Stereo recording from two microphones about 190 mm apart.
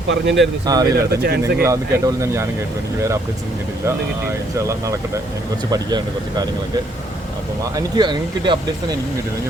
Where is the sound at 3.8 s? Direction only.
15° right (ahead or behind).